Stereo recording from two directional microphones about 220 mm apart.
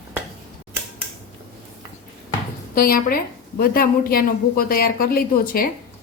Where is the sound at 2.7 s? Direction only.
40° left (ahead or behind).